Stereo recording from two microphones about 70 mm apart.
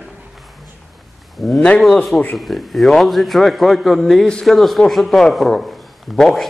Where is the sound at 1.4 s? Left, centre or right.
Centre.